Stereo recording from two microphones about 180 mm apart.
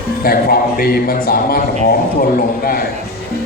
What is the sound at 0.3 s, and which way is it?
Speech, 55° left (ahead or behind).